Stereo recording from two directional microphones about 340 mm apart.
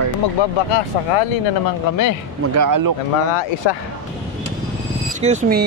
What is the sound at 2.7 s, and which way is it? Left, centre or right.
Speech, right.